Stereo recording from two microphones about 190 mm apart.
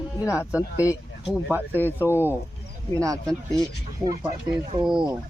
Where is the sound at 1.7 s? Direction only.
10° left (ahead or behind).